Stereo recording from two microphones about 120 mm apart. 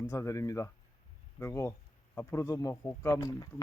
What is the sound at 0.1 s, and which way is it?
Speech, 25° left (ahead or behind).